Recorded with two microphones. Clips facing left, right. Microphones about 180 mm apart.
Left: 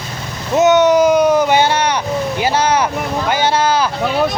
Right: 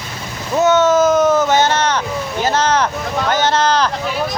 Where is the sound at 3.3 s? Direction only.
10° left (ahead or behind).